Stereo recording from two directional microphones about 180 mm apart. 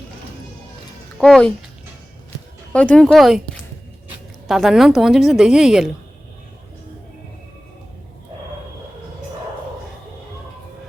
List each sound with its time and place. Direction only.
1.2 s a woman's voice: 5° left (ahead or behind)
2.7 s a woman's voice: 5° left (ahead or behind)
4.4 s a woman's voice: centre (ahead or behind)